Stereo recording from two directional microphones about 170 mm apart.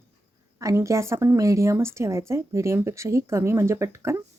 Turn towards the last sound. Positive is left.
turn(degrees=-15)  # may be behind; listen again after turning